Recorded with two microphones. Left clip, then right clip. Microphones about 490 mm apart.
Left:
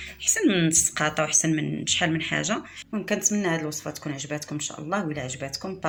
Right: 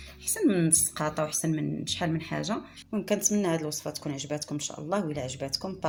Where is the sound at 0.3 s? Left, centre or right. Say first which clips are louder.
Left 3 dB; right.